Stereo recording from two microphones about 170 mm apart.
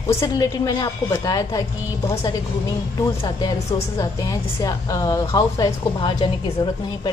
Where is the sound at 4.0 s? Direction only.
20° left (ahead or behind).